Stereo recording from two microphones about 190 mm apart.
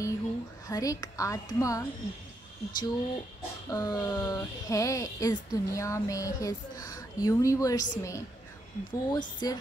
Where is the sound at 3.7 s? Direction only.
20° left (ahead or behind).